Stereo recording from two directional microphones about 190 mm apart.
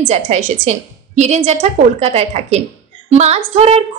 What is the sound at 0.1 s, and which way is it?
A woman's voice, 40° right (ahead or behind).